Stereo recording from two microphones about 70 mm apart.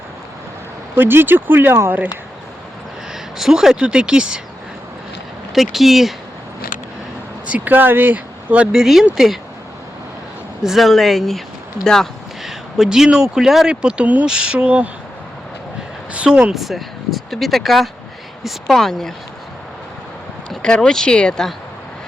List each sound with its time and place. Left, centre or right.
0.9 s speech: right
3.1 s speech: centre
5.5 s speech: centre
7.4 s speech: right
8.8 s speech: centre
10.6 s speech: centre; by 14.3 s right
14.3 s a sound: centre
16.1 s speech: centre
16.6 s speech: centre
20.5 s speech: centre